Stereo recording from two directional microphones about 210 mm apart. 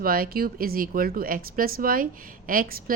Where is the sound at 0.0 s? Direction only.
45° right (ahead or behind).